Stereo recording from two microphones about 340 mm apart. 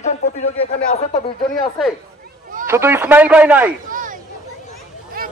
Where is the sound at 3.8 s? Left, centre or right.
Right.